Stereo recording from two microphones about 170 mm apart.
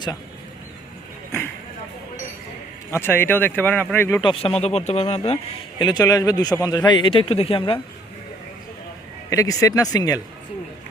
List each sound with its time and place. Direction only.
2.9 s speech: 15° left (ahead or behind)
4.2 s a man's voice: 30° left (ahead or behind)
5.8 s a man's voice: 20° left (ahead or behind)
9.3 s a man's voice: 20° left (ahead or behind)